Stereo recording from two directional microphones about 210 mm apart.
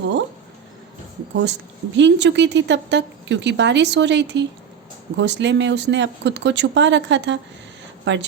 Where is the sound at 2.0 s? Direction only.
55° right (ahead or behind).